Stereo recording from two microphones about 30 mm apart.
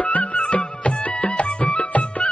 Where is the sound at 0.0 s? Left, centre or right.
Left.